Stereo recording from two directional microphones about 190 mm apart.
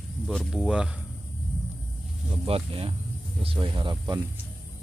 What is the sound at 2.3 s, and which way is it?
Speech, 30° right (ahead or behind).